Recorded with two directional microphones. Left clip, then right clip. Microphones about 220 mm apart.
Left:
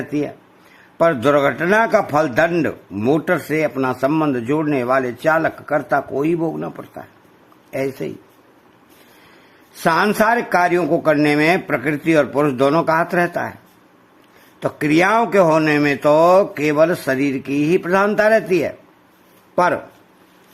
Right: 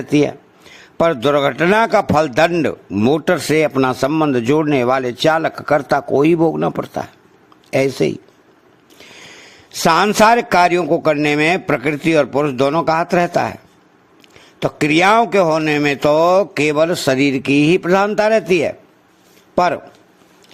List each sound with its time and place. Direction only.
0.1 s a man's voice: 25° right (ahead or behind)
9.8 s a man's voice: 25° right (ahead or behind)
14.6 s a man's voice: 20° right (ahead or behind)